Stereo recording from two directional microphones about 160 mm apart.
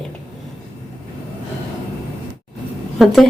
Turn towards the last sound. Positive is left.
turn(degrees=0)  # may be behind; listen again after turning